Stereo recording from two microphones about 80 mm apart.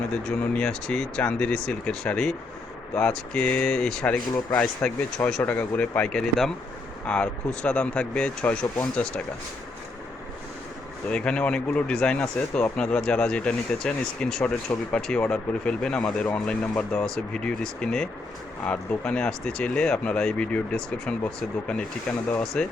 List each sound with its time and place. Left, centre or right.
0.1 s speech: centre
6.0 s speech: centre
11.1 s speech: centre